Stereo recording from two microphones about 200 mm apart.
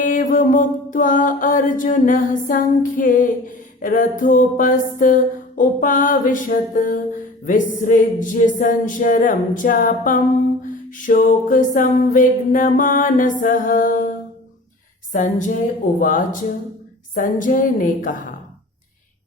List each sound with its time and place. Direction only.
0.0 s mantra: 40° left (ahead or behind)
10.7 s music: 40° left (ahead or behind)
15.1 s mantra: 40° left (ahead or behind)
16.0 s music: 40° left (ahead or behind)
17.2 s mantra: 40° left (ahead or behind)